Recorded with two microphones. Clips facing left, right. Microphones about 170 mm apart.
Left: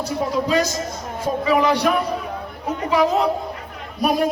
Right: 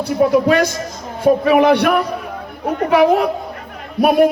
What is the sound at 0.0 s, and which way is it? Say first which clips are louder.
A man's voice: right 8 dB; 60° right (ahead or behind).